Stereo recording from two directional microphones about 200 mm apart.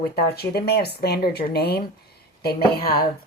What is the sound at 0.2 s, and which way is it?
Speech, 50° left (ahead or behind).